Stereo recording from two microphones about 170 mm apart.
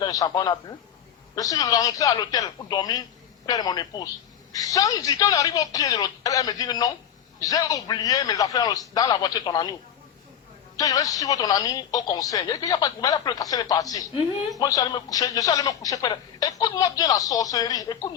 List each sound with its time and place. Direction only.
0.0 s a man's voice: 20° left (ahead or behind)
10.8 s speech: 20° left (ahead or behind)